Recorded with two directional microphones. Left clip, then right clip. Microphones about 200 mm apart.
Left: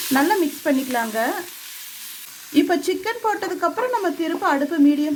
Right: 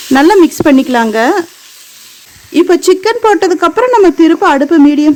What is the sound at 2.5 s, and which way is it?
Speech, 50° right (ahead or behind).